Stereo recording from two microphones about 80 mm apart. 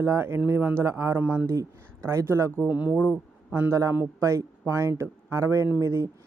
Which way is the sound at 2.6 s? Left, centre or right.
Right.